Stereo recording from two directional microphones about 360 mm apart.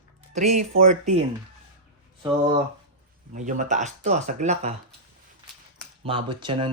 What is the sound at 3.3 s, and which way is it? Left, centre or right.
Speech, centre.